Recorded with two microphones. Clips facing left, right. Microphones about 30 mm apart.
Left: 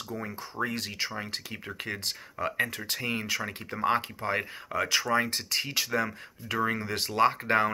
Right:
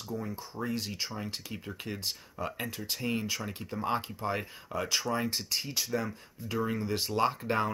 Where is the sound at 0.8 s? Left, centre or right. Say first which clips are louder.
Left 3 dB; left.